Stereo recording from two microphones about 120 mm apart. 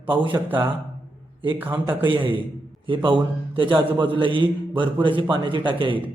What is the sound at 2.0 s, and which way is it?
A man's voice, 45° right (ahead or behind).